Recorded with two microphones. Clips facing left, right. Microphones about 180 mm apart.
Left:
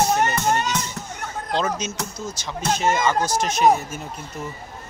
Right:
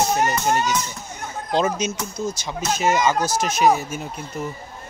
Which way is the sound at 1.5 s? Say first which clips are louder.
Right 3 dB; 15° right (ahead or behind).